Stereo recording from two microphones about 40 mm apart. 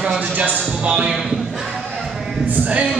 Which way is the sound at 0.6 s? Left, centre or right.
Right.